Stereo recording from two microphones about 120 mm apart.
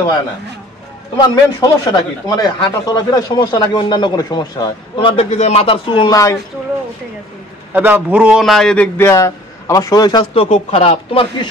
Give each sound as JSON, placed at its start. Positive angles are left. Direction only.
{"t": 1.2, "sound": "speech", "side_deg": 35}
{"t": 4.9, "sound": "a man's voice", "side_deg": 50}
{"t": 7.7, "sound": "a man's voice", "side_deg": -15}
{"t": 10.3, "sound": "speech", "side_deg": 55}